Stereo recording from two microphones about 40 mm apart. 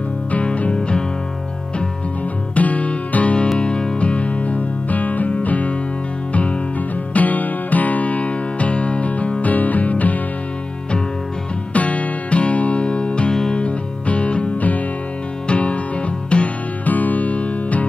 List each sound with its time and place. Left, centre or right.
0.7 s music: left
2.5 s music: left
3.5 s music: left
7.2 s music: left
11.7 s music: left
13.3 s music: centre
13.6 s music: left
16.8 s music: left